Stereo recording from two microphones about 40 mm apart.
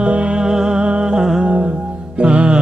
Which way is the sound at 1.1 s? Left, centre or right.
Centre.